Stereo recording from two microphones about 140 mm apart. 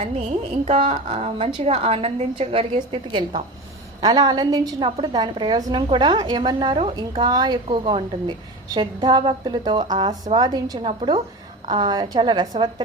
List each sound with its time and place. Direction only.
0.0 s a woman's voice: 50° right (ahead or behind); by 12.7 s 35° right (ahead or behind)